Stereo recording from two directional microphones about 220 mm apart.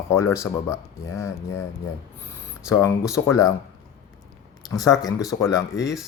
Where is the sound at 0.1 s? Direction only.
10° left (ahead or behind).